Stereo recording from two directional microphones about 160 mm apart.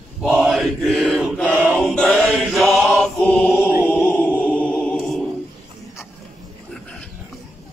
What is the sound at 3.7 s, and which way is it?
Chant, 10° right (ahead or behind).